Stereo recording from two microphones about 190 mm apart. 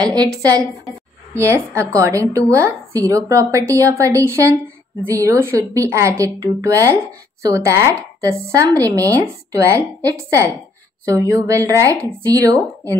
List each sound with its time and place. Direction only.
0.0 s a woman's voice: 20° right (ahead or behind)